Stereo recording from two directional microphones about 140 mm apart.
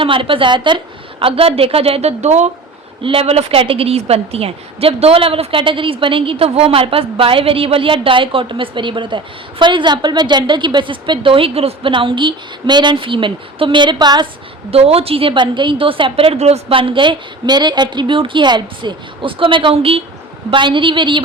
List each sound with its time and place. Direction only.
0.0 s a woman's voice: 40° right (ahead or behind)
3.0 s a woman's voice: 40° right (ahead or behind)
14.7 s a woman's voice: 45° right (ahead or behind)